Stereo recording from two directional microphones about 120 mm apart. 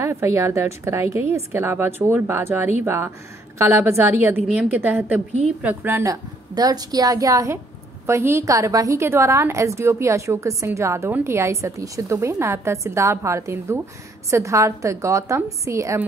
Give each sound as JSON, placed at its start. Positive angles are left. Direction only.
{"t": 0.0, "sound": "a woman's voice", "side_deg": -25}
{"t": 6.5, "sound": "a woman's voice", "side_deg": -35}